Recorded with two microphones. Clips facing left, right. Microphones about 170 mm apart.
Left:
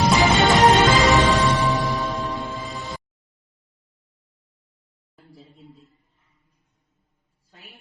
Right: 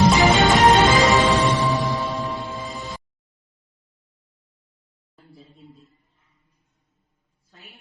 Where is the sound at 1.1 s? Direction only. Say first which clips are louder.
Even; 20° right (ahead or behind).